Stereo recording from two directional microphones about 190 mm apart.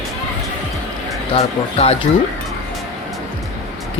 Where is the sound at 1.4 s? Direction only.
35° left (ahead or behind).